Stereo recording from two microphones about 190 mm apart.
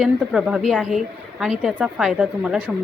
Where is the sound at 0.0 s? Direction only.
5° right (ahead or behind).